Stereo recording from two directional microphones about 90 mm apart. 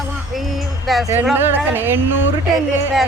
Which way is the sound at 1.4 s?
25° right (ahead or behind).